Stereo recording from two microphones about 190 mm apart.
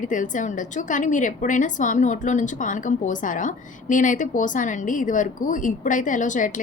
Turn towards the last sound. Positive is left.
turn(degrees=45)  # may be behind; listen again after turning